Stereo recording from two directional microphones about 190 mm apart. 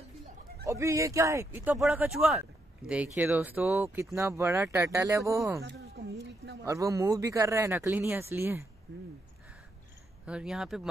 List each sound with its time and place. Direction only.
0.7 s speech: 15° right (ahead or behind)
5.6 s a sound: 60° right (ahead or behind)
6.6 s speech: 15° right (ahead or behind)
10.2 s speech: 5° right (ahead or behind)